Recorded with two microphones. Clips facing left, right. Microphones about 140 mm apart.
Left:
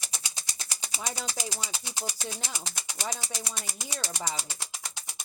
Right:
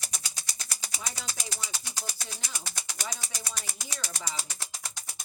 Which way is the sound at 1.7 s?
20° left (ahead or behind).